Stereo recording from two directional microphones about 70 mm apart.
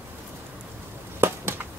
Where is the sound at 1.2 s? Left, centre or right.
Right.